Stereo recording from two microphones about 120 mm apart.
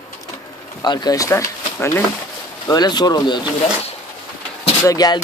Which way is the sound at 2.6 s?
35° left (ahead or behind).